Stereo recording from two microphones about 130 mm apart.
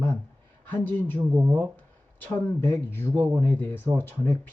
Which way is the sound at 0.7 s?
15° left (ahead or behind).